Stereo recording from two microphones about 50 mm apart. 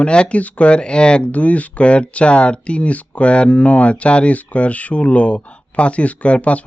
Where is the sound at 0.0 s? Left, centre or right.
Left.